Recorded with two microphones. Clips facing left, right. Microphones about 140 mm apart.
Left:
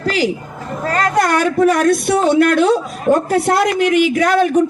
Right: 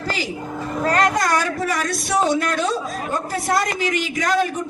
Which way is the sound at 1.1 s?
60° left (ahead or behind).